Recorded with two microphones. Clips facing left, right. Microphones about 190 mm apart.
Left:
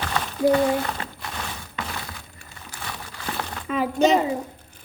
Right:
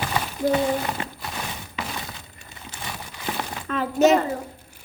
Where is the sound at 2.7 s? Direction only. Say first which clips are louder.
Even; 15° right (ahead or behind).